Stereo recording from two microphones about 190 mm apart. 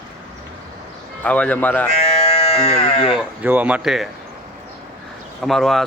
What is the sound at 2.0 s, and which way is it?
Sheep, 30° left (ahead or behind).